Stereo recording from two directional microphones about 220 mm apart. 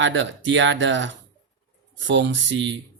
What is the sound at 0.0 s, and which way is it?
Speech, 60° right (ahead or behind).